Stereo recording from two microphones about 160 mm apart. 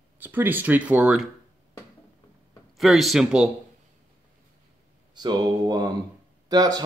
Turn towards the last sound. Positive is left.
turn(degrees=-25)  # may be behind; listen again after turning